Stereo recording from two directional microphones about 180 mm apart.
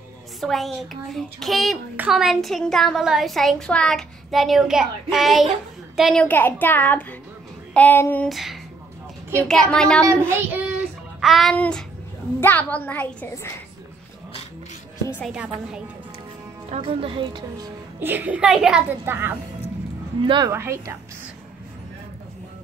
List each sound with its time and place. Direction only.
0.4 s a woman's voice: centre (ahead or behind)
8.3 s a woman's voice: centre (ahead or behind)
10.0 s a child's voice: 10° right (ahead or behind)
11.1 s a woman's voice: centre (ahead or behind)
15.2 s a woman's voice: 5° right (ahead or behind)
16.7 s a woman's voice: 35° right (ahead or behind)
17.9 s a child's voice: 10° right (ahead or behind)
20.2 s a child's voice: 20° right (ahead or behind)